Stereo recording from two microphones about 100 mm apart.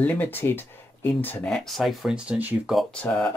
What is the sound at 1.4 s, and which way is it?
Speech, 5° left (ahead or behind).